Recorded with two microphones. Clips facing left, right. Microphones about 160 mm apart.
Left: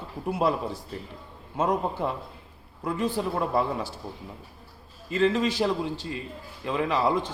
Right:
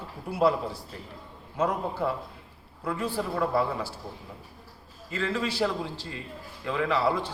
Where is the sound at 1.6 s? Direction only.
20° left (ahead or behind).